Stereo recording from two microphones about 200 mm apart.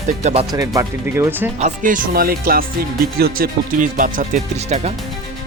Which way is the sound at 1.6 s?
40° right (ahead or behind).